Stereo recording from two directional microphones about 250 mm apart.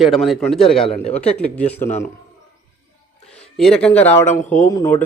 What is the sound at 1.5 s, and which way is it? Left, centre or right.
Speech, centre.